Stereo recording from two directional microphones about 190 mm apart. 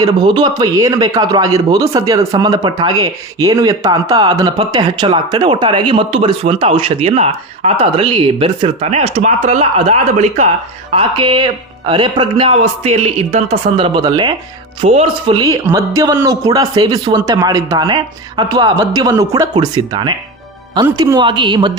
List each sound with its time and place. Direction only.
0.0 s speech: 25° right (ahead or behind)
10.9 s speech: 25° right (ahead or behind)